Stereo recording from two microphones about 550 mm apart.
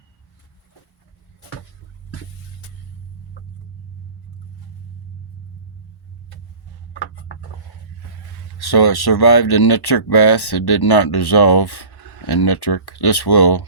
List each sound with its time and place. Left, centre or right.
8.5 s speech: left